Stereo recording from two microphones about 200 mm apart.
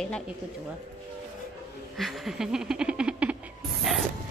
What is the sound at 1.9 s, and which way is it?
Speech, centre (ahead or behind).